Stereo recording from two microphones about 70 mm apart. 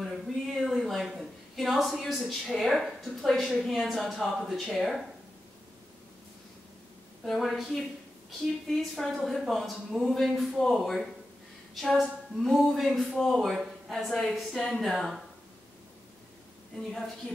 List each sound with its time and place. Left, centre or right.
0.0 s speech: centre
7.2 s a woman's voice: centre
16.7 s a woman's voice: centre